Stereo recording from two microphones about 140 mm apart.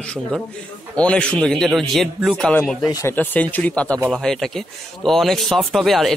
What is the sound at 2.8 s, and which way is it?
Speech, 25° left (ahead or behind).